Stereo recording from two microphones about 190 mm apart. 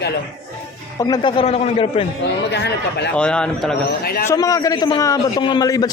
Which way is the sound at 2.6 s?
65° left (ahead or behind).